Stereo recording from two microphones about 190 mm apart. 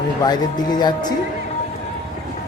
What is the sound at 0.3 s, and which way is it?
Speech, 20° left (ahead or behind).